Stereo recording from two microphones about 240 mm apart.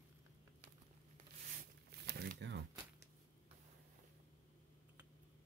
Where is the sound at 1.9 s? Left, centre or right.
Right.